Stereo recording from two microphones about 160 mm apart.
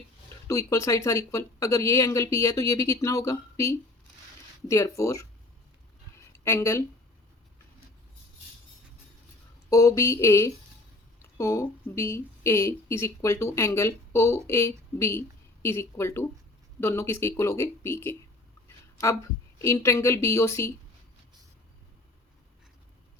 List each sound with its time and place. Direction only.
0.4 s speech: 20° left (ahead or behind)
6.4 s speech: 15° left (ahead or behind)
9.6 s speech: 20° left (ahead or behind)
19.6 s speech: 20° left (ahead or behind)